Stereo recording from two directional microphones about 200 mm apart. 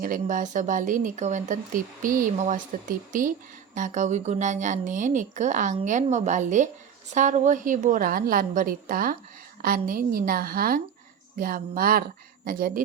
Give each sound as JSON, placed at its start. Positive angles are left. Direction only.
{"t": 0.0, "sound": "a woman's voice", "side_deg": -40}